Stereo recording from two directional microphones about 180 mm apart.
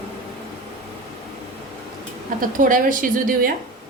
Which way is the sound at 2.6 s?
50° right (ahead or behind).